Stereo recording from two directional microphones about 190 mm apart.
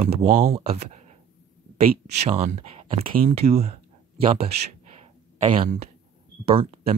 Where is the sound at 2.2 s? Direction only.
35° right (ahead or behind).